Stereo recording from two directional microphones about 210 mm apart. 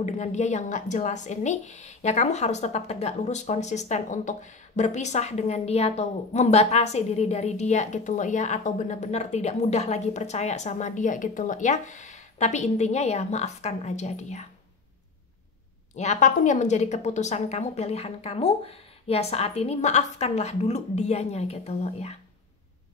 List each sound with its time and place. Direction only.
0.0 s a woman's voice: 35° left (ahead or behind)
16.0 s a woman's voice: 35° left (ahead or behind)